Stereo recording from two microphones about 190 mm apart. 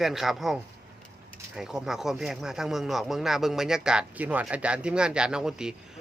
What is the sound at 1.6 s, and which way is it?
Speech, 5° right (ahead or behind).